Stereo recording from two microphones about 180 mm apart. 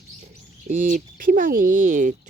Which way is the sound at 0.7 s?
45° right (ahead or behind).